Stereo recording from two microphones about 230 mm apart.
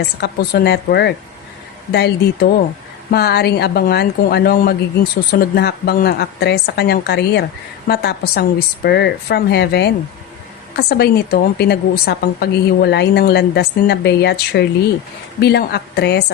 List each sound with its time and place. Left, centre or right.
0.2 s a woman's voice: left